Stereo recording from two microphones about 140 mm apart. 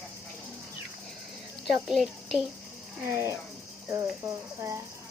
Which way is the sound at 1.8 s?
Centre (ahead or behind).